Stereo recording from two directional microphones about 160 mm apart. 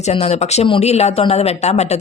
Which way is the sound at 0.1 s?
40° left (ahead or behind).